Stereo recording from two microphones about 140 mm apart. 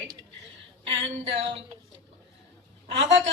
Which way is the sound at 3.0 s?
45° right (ahead or behind).